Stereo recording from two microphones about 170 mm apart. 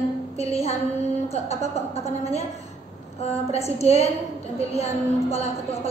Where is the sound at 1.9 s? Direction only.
40° left (ahead or behind).